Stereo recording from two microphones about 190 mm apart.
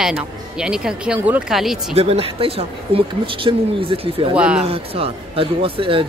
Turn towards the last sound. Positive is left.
turn(degrees=-30)  # may be behind; listen again after turning